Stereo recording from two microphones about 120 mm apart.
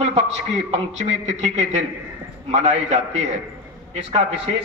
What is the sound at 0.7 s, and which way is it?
A man's voice, 75° right (ahead or behind).